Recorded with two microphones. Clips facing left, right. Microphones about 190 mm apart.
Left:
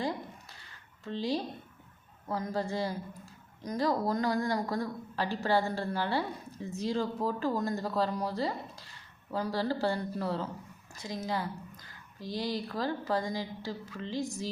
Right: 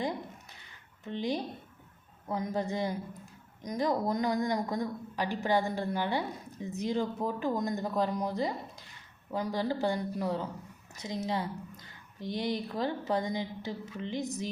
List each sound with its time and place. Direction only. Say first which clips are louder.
1.0 s a woman's voice: even; 20° right (ahead or behind)